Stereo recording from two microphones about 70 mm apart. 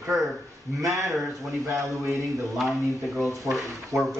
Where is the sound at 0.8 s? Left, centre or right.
Right.